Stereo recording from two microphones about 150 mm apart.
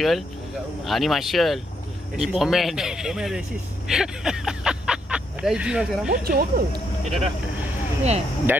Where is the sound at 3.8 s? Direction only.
5° right (ahead or behind).